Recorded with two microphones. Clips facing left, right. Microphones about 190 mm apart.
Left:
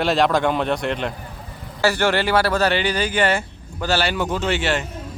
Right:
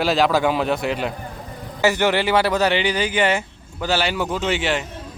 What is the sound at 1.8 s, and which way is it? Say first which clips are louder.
Speech: right 1 dB; 15° right (ahead or behind).